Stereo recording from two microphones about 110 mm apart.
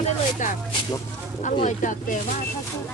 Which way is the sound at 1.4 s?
90° left.